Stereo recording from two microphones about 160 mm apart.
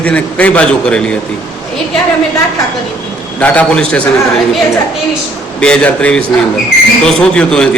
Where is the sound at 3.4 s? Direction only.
10° left (ahead or behind).